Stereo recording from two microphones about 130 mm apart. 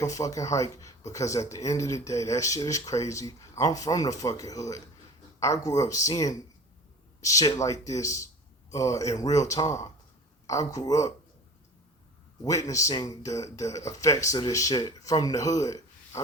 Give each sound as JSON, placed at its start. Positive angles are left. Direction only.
{"t": 0.0, "sound": "speech", "side_deg": 25}
{"t": 12.5, "sound": "speech", "side_deg": 25}